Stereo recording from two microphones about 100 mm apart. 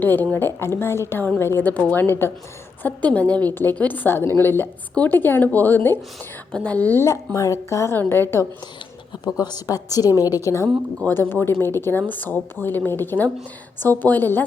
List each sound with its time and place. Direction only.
0.0 s a woman's voice: 20° left (ahead or behind)
7.3 s a woman's voice: 30° left (ahead or behind)
9.2 s a woman's voice: 45° left (ahead or behind)
10.2 s a woman's voice: 20° right (ahead or behind)
11.0 s a woman's voice: 20° left (ahead or behind)